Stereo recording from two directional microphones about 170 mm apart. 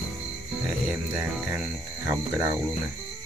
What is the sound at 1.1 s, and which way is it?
Cricket, 10° right (ahead or behind).